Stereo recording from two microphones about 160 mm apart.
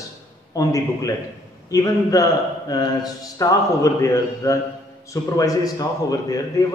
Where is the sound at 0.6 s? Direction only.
20° left (ahead or behind).